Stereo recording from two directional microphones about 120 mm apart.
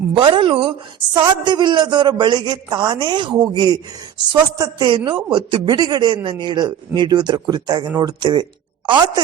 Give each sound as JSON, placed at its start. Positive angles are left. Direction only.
{"t": 0.1, "sound": "a woman's voice", "side_deg": -45}